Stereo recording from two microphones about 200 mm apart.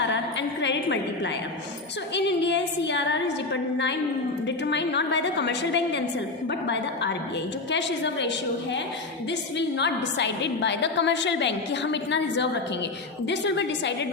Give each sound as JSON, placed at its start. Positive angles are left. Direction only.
{"t": 0.1, "sound": "a sound", "side_deg": 60}
{"t": 2.1, "sound": "a woman's voice", "side_deg": 60}
{"t": 9.6, "sound": "a woman's voice", "side_deg": 60}